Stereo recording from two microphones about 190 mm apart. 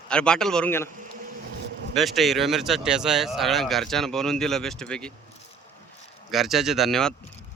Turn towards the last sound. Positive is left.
turn(degrees=0)  # may be behind; listen again after turning